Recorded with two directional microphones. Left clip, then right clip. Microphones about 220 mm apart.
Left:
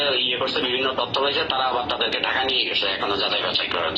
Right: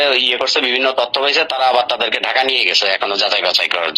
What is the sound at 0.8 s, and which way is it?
A man's voice, 55° right (ahead or behind).